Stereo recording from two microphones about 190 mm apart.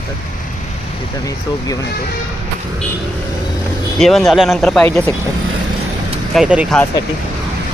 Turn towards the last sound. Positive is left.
turn(degrees=-5)  # may be behind; listen again after turning